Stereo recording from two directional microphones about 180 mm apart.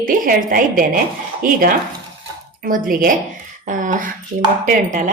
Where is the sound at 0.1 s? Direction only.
50° right (ahead or behind).